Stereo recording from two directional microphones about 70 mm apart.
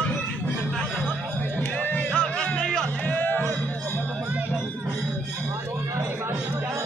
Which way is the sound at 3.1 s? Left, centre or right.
Left.